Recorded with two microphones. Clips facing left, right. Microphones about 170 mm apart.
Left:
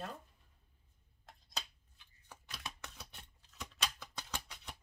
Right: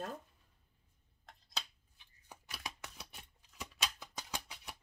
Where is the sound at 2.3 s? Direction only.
10° right (ahead or behind).